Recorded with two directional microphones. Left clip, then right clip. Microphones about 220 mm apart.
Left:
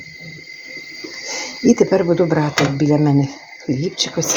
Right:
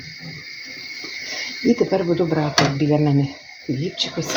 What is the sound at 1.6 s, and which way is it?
Speech, 35° left (ahead or behind).